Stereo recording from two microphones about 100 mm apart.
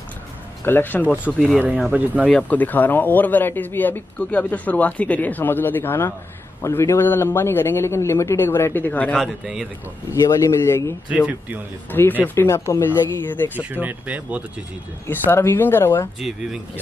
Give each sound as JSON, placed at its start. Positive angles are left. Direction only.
{"t": 0.7, "sound": "a man's voice", "side_deg": 20}
{"t": 2.2, "sound": "a man's voice", "side_deg": 15}
{"t": 9.1, "sound": "speech", "side_deg": 0}
{"t": 10.2, "sound": "a man's voice", "side_deg": 30}
{"t": 11.1, "sound": "speech", "side_deg": -10}
{"t": 11.9, "sound": "a man's voice", "side_deg": 20}
{"t": 13.6, "sound": "speech", "side_deg": -15}
{"t": 15.0, "sound": "a man's voice", "side_deg": 25}